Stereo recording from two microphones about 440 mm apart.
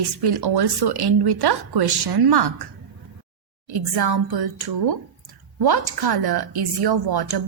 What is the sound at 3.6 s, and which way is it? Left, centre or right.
A woman's voice, right.